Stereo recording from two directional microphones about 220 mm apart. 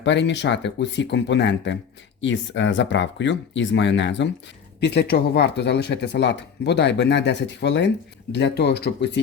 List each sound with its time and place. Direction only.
0.0 s speech: 55° left (ahead or behind)